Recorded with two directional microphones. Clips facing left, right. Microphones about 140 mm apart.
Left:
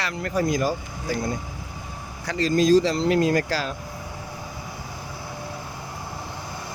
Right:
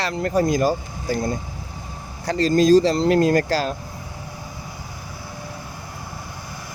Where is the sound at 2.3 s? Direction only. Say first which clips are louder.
Right 3 dB; 35° right (ahead or behind).